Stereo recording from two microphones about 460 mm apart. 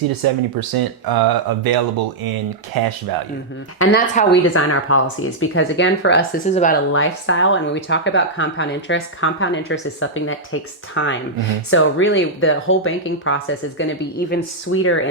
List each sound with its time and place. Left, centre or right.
0.2 s speech: right
3.8 s speech: centre